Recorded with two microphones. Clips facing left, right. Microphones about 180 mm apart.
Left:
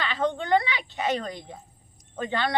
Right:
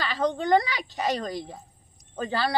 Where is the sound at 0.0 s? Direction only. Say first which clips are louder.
Right 1 dB; 40° right (ahead or behind).